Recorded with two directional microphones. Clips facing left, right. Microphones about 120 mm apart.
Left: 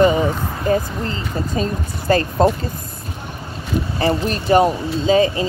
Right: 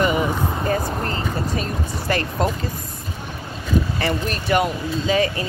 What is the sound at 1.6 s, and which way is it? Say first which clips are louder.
Speech: left 3 dB; 30° left (ahead or behind).